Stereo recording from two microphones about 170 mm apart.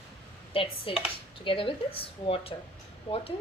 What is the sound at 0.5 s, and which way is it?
Speech, 30° left (ahead or behind).